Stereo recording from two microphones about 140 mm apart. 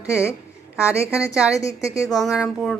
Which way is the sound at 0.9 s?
20° left (ahead or behind).